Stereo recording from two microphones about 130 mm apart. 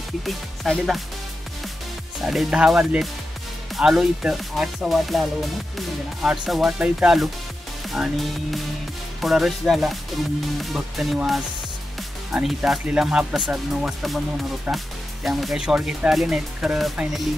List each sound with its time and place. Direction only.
0.2 s speech: centre (ahead or behind)
2.2 s speech: 5° right (ahead or behind)